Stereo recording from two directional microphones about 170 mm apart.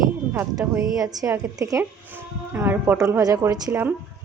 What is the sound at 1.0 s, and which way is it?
A woman's voice, 20° right (ahead or behind).